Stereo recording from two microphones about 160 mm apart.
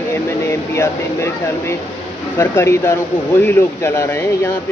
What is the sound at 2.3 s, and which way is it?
Speech, 15° left (ahead or behind).